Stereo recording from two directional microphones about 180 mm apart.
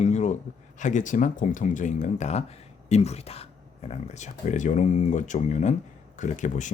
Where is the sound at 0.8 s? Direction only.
45° left (ahead or behind).